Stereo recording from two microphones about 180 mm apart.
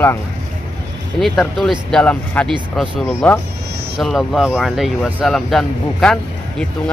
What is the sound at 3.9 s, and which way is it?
Speech, centre (ahead or behind).